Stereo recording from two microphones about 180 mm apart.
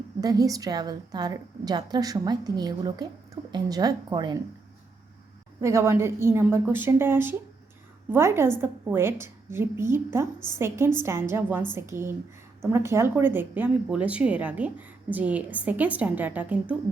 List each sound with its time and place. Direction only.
0.2 s a woman's voice: 20° right (ahead or behind)
5.5 s speech: 15° right (ahead or behind)